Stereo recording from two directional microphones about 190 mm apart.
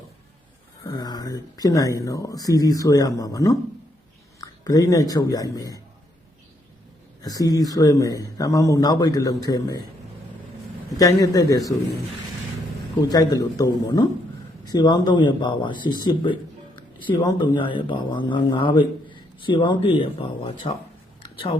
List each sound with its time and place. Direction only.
0.9 s speech: 20° left (ahead or behind)
7.2 s speech: 20° left (ahead or behind)
10.9 s speech: 20° left (ahead or behind)
13.1 s speech: 20° left (ahead or behind)